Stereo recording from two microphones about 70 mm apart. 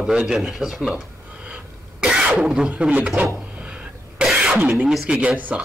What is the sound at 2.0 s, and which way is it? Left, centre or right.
Throat clearing, centre.